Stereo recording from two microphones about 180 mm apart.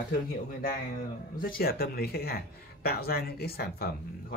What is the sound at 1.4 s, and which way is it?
Speech, 55° left (ahead or behind).